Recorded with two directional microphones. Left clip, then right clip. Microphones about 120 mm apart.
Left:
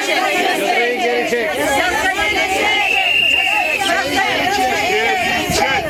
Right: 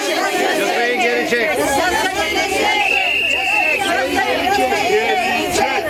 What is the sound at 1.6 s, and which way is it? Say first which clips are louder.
Chatter: even; 10° right (ahead or behind).